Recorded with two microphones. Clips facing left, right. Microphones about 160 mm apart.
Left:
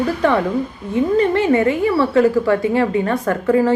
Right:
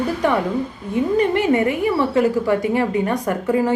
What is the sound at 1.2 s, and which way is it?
A woman's voice, 15° right (ahead or behind).